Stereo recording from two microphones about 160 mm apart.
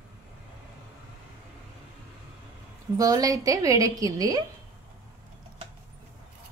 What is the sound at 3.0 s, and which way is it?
A woman's voice, 20° right (ahead or behind).